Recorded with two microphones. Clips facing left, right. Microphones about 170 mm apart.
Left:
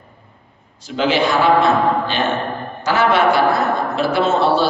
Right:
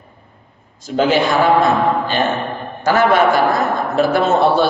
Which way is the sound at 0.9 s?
45° right (ahead or behind).